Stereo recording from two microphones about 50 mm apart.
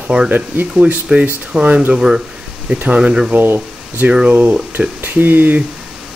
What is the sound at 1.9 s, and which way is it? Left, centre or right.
Speech, centre.